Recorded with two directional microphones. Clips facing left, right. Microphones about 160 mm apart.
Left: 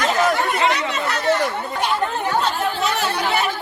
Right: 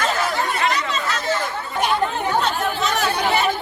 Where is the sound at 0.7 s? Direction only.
60° left (ahead or behind).